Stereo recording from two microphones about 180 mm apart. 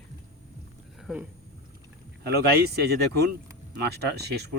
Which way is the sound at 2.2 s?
60° right (ahead or behind).